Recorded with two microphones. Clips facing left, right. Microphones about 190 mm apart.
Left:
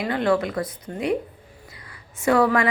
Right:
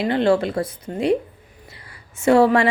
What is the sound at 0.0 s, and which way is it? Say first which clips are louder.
A woman's voice: right 4 dB; 25° right (ahead or behind).